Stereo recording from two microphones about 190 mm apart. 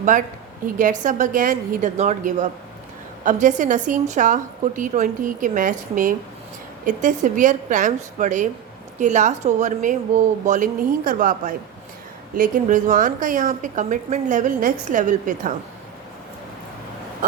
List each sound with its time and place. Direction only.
0.8 s a woman's voice: 45° right (ahead or behind)